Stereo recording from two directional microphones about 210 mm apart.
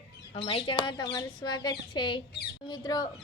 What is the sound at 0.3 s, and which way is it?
A woman's voice, 25° left (ahead or behind).